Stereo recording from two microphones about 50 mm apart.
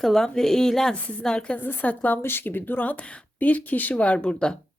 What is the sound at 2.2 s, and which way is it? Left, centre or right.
Speech, left.